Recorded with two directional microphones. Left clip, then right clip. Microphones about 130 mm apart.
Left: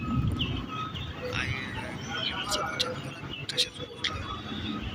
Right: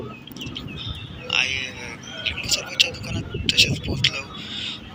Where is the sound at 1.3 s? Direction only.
50° right (ahead or behind).